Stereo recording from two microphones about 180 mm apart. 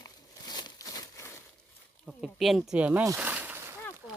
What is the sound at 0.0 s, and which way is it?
Crumpling, 25° left (ahead or behind).